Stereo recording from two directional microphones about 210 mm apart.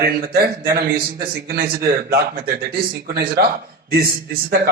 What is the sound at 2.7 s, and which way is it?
Speech, 45° right (ahead or behind).